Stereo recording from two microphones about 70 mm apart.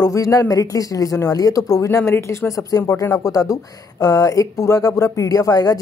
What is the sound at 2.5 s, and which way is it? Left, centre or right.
A woman's voice, left.